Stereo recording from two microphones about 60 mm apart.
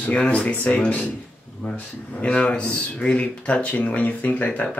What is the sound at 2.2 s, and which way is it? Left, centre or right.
Speech, left.